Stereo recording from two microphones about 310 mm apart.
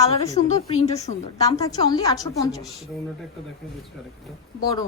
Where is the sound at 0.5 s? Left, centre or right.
Centre.